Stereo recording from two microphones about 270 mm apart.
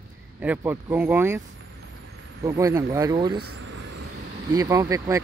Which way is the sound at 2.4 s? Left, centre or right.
Centre.